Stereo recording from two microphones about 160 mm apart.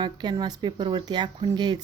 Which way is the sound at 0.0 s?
25° right (ahead or behind).